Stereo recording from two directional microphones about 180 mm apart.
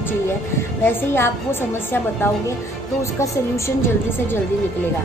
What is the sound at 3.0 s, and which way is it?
Speech, 15° left (ahead or behind).